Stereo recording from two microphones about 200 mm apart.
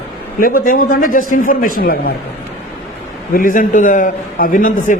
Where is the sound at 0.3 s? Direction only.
45° left (ahead or behind).